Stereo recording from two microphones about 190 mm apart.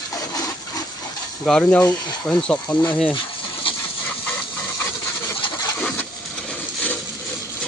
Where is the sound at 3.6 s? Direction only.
30° left (ahead or behind).